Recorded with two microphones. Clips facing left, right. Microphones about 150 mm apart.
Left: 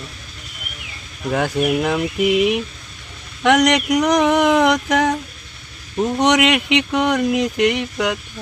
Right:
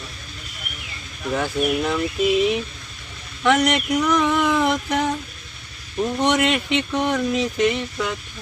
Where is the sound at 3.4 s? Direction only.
75° left (ahead or behind).